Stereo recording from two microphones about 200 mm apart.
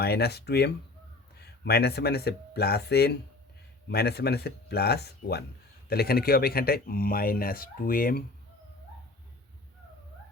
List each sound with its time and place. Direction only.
0.0 s speech: 55° left (ahead or behind)